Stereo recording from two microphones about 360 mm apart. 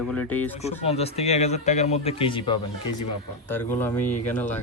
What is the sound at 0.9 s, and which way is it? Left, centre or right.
Speech, centre.